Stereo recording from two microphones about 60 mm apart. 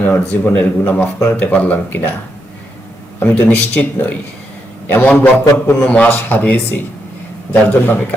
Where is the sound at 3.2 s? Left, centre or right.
Left.